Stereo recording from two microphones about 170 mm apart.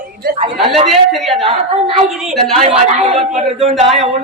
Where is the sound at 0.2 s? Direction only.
60° right (ahead or behind).